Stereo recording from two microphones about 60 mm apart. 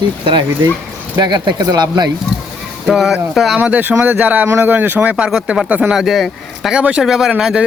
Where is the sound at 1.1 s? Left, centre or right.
Right.